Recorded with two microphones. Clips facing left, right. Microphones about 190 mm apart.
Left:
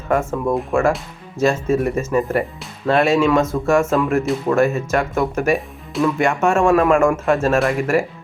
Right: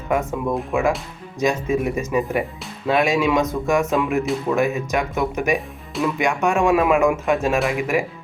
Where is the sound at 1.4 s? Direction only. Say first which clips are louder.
Left 3 dB; 15° right (ahead or behind).